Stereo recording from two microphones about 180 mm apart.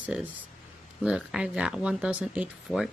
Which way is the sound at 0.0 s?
10° right (ahead or behind).